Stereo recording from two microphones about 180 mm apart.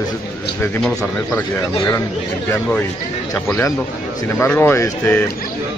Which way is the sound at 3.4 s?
15° left (ahead or behind).